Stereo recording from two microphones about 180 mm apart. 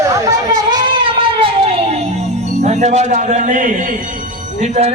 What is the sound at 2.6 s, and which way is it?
A man's voice, 40° right (ahead or behind).